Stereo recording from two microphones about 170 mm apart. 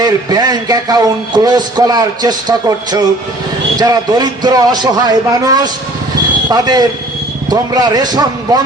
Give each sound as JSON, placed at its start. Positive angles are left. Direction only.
{"t": 0.0, "sound": "a man's voice", "side_deg": -20}